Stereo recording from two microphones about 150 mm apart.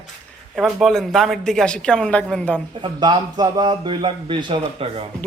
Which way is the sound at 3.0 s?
25° right (ahead or behind).